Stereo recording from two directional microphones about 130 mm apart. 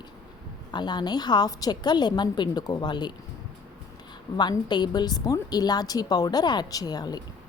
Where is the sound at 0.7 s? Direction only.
35° left (ahead or behind).